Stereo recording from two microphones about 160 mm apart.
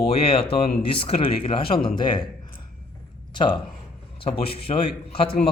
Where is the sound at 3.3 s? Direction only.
30° left (ahead or behind).